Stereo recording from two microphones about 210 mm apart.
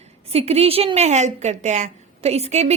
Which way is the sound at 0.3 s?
30° right (ahead or behind).